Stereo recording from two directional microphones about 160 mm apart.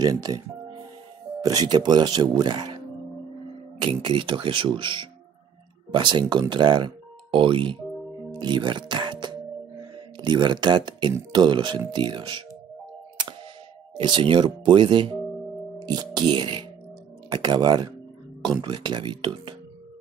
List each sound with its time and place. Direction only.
0.0 s speech: 25° right (ahead or behind)
1.4 s speech: 25° right (ahead or behind)
3.8 s speech: 30° right (ahead or behind)
8.3 s music: 30° right (ahead or behind)
9.9 s speech: 30° right (ahead or behind)
13.9 s speech: 30° right (ahead or behind)